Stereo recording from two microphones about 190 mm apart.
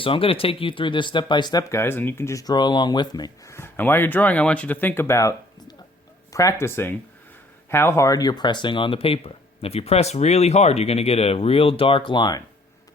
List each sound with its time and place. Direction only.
0.0 s speech: 30° left (ahead or behind)